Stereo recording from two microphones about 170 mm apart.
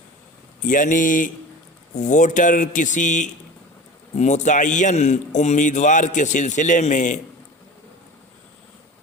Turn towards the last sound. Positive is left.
turn(degrees=45)  # may be behind; listen again after turning